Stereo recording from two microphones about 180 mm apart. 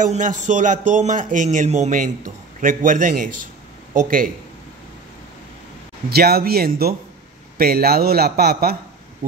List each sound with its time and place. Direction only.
0.0 s speech: 45° right (ahead or behind)
6.0 s a man's voice: 60° right (ahead or behind)